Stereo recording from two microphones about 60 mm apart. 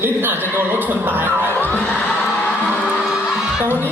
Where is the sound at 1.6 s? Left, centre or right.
Left.